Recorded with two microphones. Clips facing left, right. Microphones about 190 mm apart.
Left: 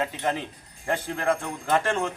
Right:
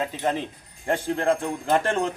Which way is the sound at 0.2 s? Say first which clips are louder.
Right 2 dB; 20° right (ahead or behind).